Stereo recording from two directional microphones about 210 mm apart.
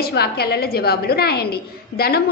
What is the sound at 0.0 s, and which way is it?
A woman's voice, 50° left (ahead or behind).